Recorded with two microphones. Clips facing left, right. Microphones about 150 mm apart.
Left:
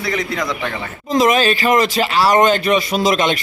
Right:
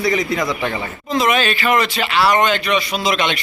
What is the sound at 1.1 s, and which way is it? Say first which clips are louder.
Speech: left 3 dB; 40° left (ahead or behind).